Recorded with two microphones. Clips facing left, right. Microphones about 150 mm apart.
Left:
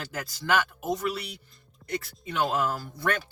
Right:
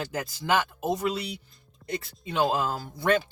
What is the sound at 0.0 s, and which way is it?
Speech, 20° right (ahead or behind).